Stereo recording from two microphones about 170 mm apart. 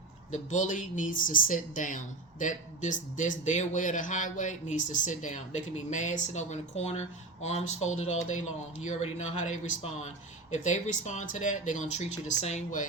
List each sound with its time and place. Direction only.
0.3 s a man's voice: 45° left (ahead or behind)